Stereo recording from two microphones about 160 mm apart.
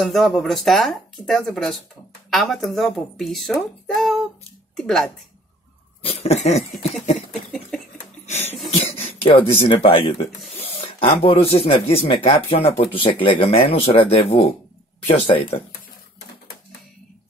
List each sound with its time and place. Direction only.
0.0 s a child's voice: centre (ahead or behind)
6.0 s speech: 40° left (ahead or behind)
8.3 s speech: 40° left (ahead or behind)